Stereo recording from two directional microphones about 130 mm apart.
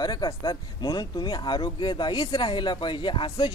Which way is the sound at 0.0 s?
30° left (ahead or behind).